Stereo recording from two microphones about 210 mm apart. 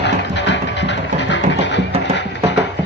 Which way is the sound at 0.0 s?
55° left (ahead or behind).